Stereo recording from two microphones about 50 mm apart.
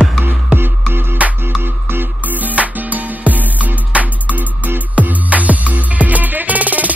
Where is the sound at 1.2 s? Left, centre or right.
Right.